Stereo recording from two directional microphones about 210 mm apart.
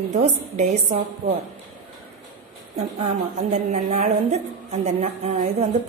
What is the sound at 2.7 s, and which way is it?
A woman's voice, 30° right (ahead or behind).